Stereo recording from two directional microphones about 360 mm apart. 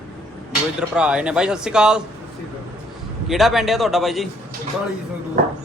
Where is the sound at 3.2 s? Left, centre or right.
Centre.